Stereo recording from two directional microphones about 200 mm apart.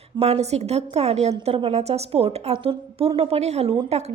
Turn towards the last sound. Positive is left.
turn(degrees=-30)  # may be behind; listen again after turning